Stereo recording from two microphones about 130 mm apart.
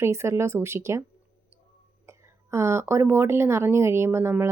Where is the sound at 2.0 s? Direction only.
20° right (ahead or behind).